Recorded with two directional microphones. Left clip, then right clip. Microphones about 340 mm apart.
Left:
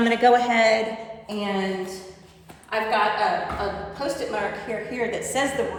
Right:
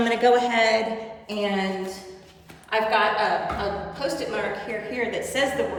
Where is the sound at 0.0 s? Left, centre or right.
Left.